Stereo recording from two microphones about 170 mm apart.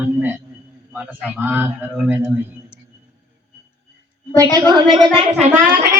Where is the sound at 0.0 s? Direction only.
10° right (ahead or behind).